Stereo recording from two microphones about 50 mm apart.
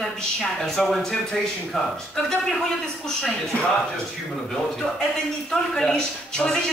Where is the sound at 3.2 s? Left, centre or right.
Centre.